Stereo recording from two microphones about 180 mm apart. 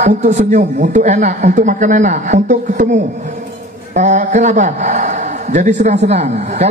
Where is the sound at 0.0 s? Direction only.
45° right (ahead or behind).